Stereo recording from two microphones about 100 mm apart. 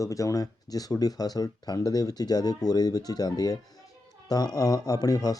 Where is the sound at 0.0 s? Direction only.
35° left (ahead or behind).